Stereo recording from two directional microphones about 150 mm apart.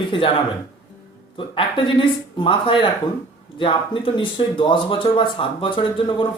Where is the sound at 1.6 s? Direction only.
35° left (ahead or behind).